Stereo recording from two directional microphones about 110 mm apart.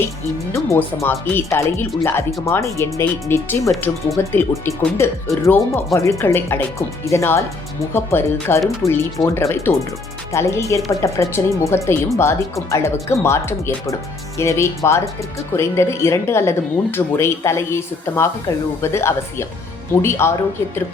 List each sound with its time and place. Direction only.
1.0 s speech: 20° left (ahead or behind)